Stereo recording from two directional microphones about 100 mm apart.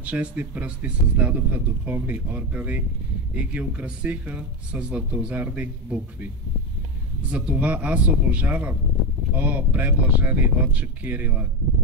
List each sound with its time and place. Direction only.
0.0 s speech: 15° right (ahead or behind)